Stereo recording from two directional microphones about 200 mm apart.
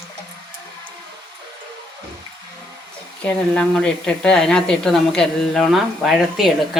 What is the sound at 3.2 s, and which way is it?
A woman's voice, 5° left (ahead or behind).